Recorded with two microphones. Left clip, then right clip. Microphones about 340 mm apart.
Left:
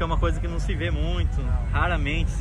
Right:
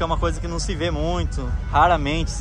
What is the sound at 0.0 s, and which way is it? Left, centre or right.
Speech, centre.